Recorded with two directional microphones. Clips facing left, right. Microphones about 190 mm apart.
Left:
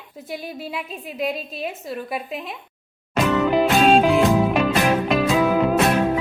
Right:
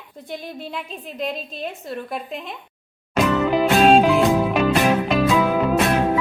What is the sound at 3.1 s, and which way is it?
Music, centre (ahead or behind).